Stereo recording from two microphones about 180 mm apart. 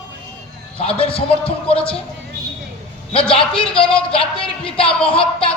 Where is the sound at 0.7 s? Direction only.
30° left (ahead or behind).